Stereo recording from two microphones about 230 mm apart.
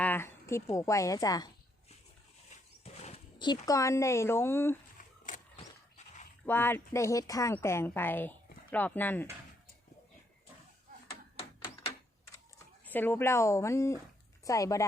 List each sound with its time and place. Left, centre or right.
0.0 s a woman's voice: centre
2.8 s a sound: left
3.7 s a woman's voice: centre
4.9 s a sound: left
6.4 s a woman's voice: centre
12.8 s a woman's voice: centre